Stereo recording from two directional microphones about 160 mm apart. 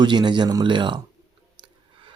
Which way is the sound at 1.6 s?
30° right (ahead or behind).